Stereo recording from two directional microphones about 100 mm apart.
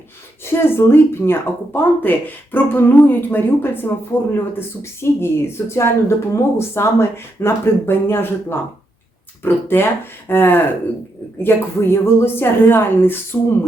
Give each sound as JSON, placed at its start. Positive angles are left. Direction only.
{"t": 0.4, "sound": "speech", "side_deg": 25}